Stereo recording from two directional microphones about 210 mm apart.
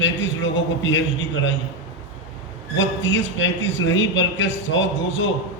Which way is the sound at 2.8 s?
65° left (ahead or behind).